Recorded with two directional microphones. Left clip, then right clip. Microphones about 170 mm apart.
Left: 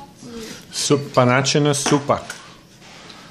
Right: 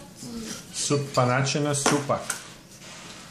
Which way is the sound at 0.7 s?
55° left (ahead or behind).